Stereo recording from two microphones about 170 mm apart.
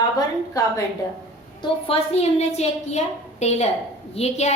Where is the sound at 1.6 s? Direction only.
35° left (ahead or behind).